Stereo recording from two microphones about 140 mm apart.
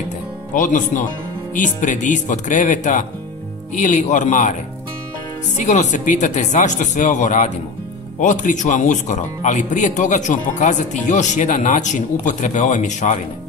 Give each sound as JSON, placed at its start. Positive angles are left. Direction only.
{"t": 0.5, "sound": "speech", "side_deg": 65}
{"t": 5.7, "sound": "speech", "side_deg": 60}